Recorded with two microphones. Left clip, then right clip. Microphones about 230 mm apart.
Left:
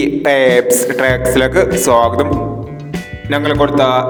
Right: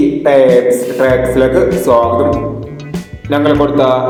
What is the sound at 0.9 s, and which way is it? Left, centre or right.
Speech, left.